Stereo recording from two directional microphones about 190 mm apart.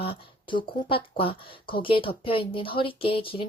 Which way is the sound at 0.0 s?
25° left (ahead or behind).